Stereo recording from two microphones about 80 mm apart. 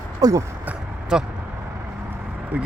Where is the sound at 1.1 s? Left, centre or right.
Centre.